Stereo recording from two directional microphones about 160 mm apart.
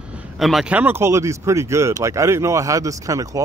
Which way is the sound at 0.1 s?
5° right (ahead or behind).